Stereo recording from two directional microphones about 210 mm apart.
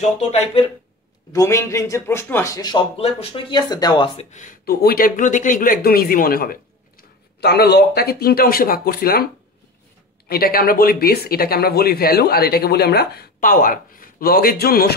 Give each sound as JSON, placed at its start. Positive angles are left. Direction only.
{"t": 0.2, "sound": "speech", "side_deg": 30}
{"t": 1.3, "sound": "speech", "side_deg": 15}
{"t": 10.2, "sound": "speech", "side_deg": 45}